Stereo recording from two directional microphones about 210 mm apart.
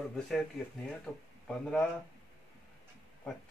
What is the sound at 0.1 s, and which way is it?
Speech, centre (ahead or behind).